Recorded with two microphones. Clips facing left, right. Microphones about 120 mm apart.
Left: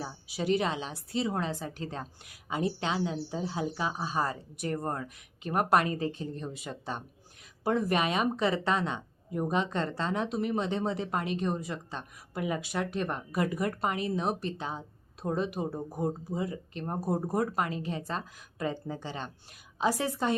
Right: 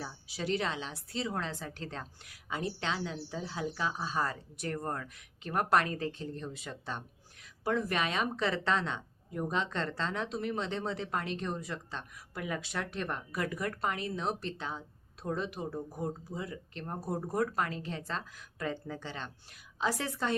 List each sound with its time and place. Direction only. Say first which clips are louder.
0.0 s a woman's voice: left 4 dB; 15° left (ahead or behind)